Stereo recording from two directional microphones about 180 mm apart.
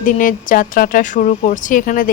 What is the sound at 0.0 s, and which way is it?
Speech, 50° left (ahead or behind).